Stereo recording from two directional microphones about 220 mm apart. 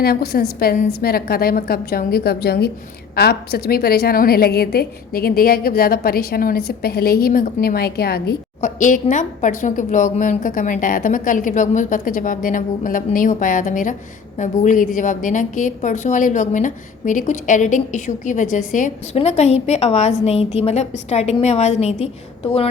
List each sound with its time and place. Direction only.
0.0 s a woman's voice: 45° left (ahead or behind); by 22.1 s 30° left (ahead or behind)